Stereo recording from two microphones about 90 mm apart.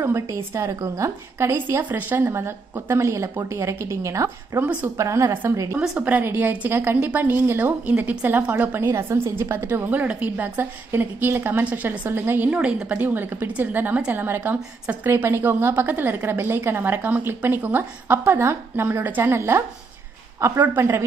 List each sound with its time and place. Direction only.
0.0 s a woman's voice: 30° right (ahead or behind)
5.8 s a woman's voice: 15° right (ahead or behind)